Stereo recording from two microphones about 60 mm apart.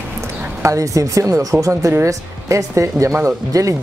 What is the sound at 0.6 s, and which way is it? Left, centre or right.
Speech, right.